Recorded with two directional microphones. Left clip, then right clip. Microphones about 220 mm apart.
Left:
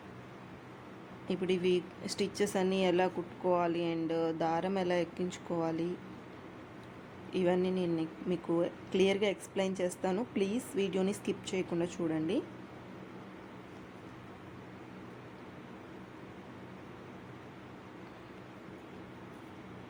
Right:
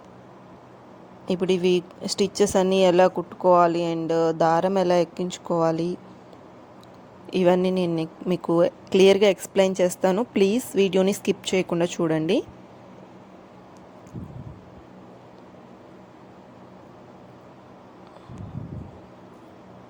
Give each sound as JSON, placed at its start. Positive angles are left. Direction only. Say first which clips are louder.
{"t": 1.3, "sound": "speech", "louder": "right 10 dB", "side_deg": -35}
{"t": 7.3, "sound": "speech", "louder": "right 11 dB", "side_deg": -40}